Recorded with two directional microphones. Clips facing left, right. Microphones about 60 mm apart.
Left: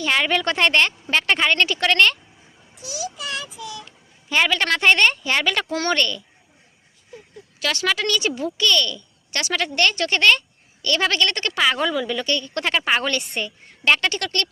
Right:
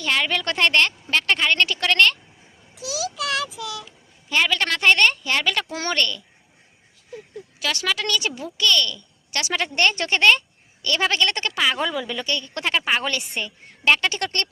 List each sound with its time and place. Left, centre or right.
0.0 s a woman's voice: centre
2.7 s child singing: right
3.8 s a woman's voice: centre
7.6 s a woman's voice: centre
9.4 s a woman's voice: centre
14.2 s speech: right